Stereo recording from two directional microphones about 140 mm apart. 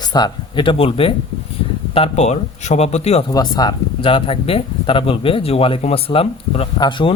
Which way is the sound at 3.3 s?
30° left (ahead or behind).